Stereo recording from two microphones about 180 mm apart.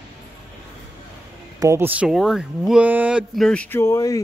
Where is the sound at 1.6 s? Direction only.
15° right (ahead or behind).